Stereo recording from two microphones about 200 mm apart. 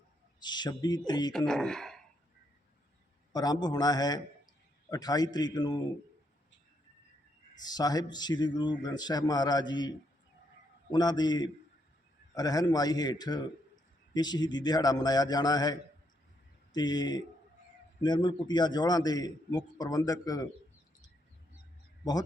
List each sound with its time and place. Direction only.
0.4 s a man's voice: 20° left (ahead or behind)
1.3 s speech: 5° left (ahead or behind)
3.3 s a man's voice: 20° left (ahead or behind)
7.6 s a man's voice: 20° left (ahead or behind)
10.9 s a man's voice: 20° left (ahead or behind)